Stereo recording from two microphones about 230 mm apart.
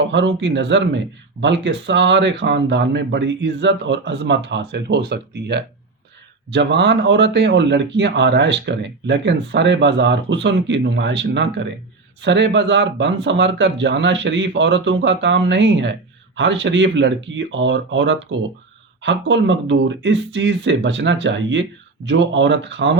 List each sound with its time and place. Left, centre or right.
0.1 s speech: right